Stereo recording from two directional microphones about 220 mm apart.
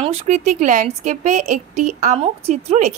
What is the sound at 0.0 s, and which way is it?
A woman's voice, 25° right (ahead or behind).